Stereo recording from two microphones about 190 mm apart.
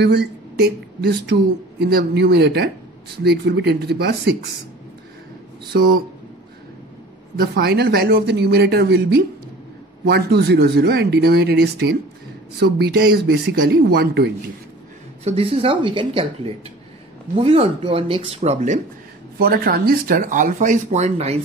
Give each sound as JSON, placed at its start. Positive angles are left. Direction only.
{"t": 0.0, "sound": "speech", "side_deg": -60}
{"t": 5.7, "sound": "speech", "side_deg": -55}
{"t": 7.3, "sound": "speech", "side_deg": -55}
{"t": 15.2, "sound": "speech", "side_deg": -30}
{"t": 19.3, "sound": "speech", "side_deg": -50}